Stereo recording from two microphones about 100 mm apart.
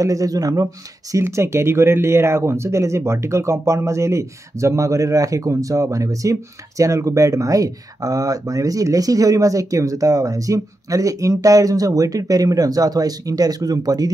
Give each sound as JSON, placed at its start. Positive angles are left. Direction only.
{"t": 0.0, "sound": "speech", "side_deg": -35}